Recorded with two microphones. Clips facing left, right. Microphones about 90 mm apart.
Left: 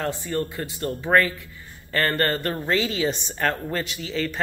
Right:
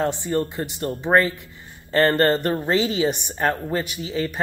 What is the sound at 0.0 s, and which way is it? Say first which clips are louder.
A woman's voice: right 4 dB; 20° right (ahead or behind).